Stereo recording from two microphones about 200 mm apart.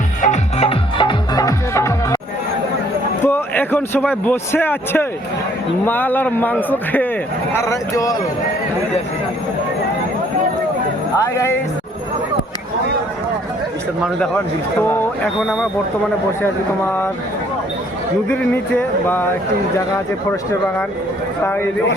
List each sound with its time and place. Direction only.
0.2 s music: 35° left (ahead or behind); by 2.1 s 15° left (ahead or behind)
3.2 s a man's voice: 10° left (ahead or behind)
11.3 s speech: 15° left (ahead or behind)
14.0 s speech: 5° left (ahead or behind)
18.3 s a man's voice: 10° left (ahead or behind)